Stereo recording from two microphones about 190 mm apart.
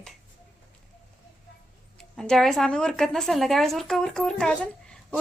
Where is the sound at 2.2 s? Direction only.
Centre (ahead or behind).